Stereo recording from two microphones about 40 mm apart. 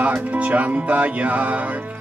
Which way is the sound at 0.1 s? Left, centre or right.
Right.